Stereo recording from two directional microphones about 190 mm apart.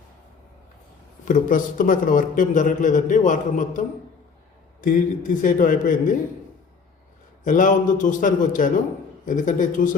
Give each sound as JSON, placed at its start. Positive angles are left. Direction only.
{"t": 1.2, "sound": "a man's voice", "side_deg": 45}
{"t": 7.4, "sound": "a man's voice", "side_deg": 40}